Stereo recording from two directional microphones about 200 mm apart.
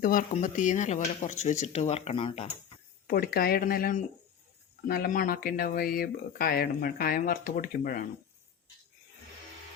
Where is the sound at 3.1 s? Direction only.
50° left (ahead or behind).